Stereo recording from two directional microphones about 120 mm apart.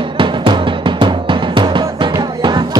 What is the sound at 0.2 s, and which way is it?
Music, 45° right (ahead or behind).